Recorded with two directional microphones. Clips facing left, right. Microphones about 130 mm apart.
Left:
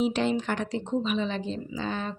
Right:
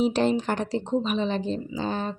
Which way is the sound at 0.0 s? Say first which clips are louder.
Right 3 dB; 40° right (ahead or behind).